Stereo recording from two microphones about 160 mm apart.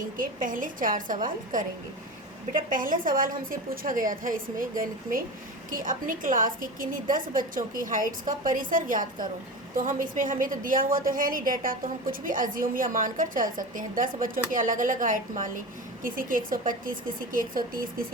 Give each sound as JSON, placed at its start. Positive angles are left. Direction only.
{"t": 0.2, "sound": "a woman's voice", "side_deg": -55}
{"t": 5.7, "sound": "a woman's voice", "side_deg": -55}